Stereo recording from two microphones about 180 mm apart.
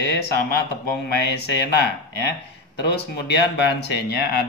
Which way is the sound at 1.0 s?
65° left (ahead or behind).